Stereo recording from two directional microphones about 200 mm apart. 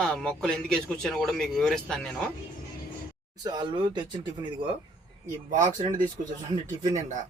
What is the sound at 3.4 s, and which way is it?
Speech, 20° right (ahead or behind).